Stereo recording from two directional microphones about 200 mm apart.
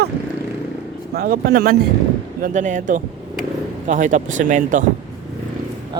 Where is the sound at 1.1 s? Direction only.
50° right (ahead or behind).